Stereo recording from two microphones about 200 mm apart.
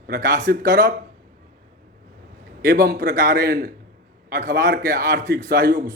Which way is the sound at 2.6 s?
50° right (ahead or behind).